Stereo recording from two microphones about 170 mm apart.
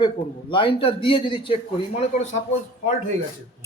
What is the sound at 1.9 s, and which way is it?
Speech, 45° left (ahead or behind).